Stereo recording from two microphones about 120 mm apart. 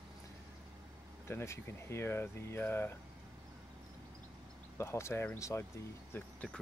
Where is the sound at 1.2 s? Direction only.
25° left (ahead or behind).